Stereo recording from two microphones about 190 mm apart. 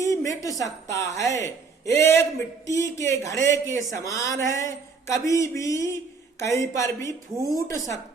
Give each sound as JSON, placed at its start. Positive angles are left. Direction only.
{"t": 0.0, "sound": "speech", "side_deg": 15}